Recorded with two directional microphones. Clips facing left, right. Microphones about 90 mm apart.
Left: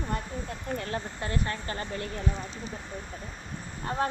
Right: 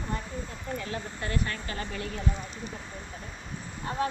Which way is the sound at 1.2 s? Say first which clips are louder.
Right 1 dB; 30° left (ahead or behind).